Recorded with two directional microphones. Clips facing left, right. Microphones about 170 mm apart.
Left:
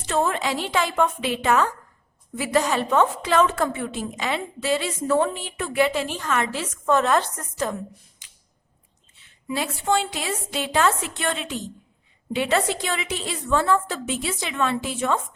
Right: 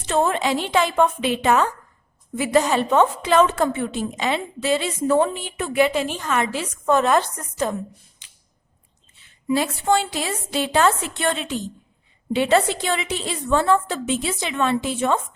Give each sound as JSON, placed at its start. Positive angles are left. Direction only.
{"t": 0.1, "sound": "a woman's voice", "side_deg": -25}
{"t": 9.6, "sound": "a woman's voice", "side_deg": -40}